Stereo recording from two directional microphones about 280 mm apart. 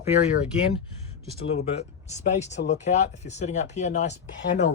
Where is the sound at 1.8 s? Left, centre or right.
Left.